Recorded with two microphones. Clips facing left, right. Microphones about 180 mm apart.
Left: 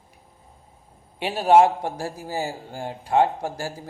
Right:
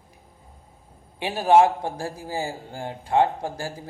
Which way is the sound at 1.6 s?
20° left (ahead or behind).